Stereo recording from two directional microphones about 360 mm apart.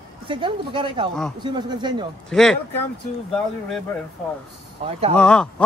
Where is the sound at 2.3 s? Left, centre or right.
Centre.